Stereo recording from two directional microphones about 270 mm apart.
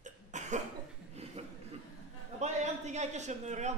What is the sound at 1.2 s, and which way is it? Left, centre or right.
Chuckle, right.